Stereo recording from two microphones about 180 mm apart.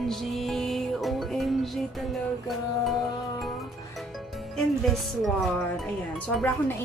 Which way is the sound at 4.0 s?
Centre (ahead or behind).